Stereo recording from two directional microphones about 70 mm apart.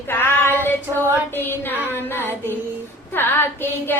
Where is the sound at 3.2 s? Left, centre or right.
Left.